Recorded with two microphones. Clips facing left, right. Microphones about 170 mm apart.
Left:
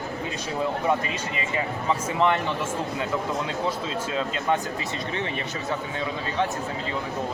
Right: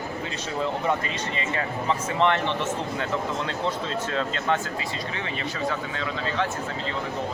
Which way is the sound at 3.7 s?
10° left (ahead or behind).